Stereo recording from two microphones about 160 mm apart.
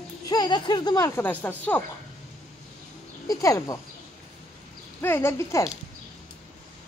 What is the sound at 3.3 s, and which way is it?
Speech, 20° left (ahead or behind).